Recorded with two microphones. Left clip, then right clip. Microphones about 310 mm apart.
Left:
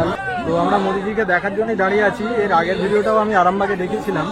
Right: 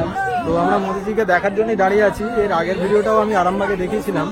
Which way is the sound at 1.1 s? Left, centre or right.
Centre.